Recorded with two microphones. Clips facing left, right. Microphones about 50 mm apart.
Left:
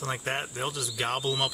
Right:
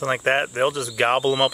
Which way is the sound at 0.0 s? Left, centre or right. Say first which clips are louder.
Right 11 dB; right.